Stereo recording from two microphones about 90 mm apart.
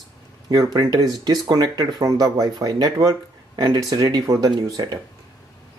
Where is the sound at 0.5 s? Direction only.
40° right (ahead or behind).